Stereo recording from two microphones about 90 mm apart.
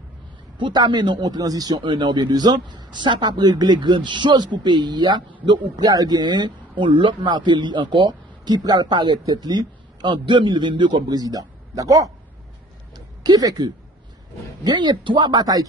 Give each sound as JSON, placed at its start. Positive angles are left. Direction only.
{"t": 0.6, "sound": "a man's voice", "side_deg": -60}
{"t": 12.9, "sound": "a sound", "side_deg": -45}
{"t": 14.6, "sound": "speech", "side_deg": -55}